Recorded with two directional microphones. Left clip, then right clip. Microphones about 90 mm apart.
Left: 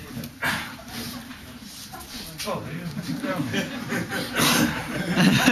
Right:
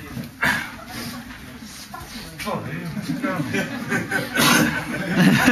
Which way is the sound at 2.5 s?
Centre (ahead or behind).